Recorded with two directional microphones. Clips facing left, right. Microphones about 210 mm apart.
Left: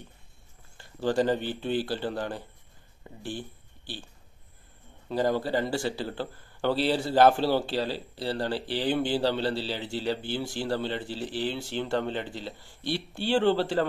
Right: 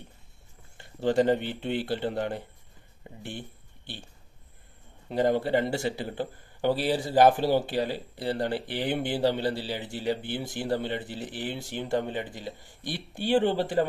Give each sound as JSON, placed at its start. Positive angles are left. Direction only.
{"t": 0.7, "sound": "speech", "side_deg": -20}
{"t": 3.0, "sound": "a sound", "side_deg": -20}
{"t": 5.0, "sound": "speech", "side_deg": -20}